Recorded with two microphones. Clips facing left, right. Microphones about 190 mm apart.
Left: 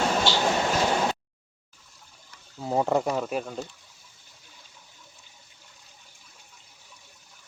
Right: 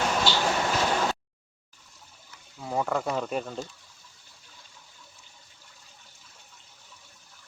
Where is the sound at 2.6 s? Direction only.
25° left (ahead or behind).